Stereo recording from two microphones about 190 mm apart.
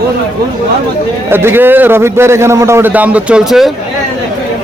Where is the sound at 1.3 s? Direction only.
10° right (ahead or behind).